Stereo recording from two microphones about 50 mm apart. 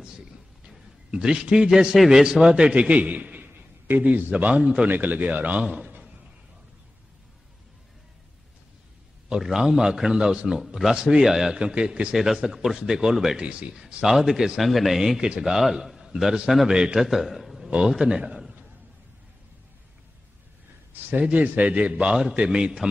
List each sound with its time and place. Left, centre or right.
0.7 s a man's voice: centre
2.7 s a man's voice: right
3.5 s a sound: right
4.0 s a man's voice: right
5.6 s a man's voice: centre
5.9 s a sound: right
9.4 s a man's voice: centre
11.5 s a man's voice: centre
13.4 s a man's voice: right
13.7 s a man's voice: centre
15.1 s a man's voice: centre
15.5 s a man's voice: centre
21.1 s a man's voice: right
22.5 s a man's voice: centre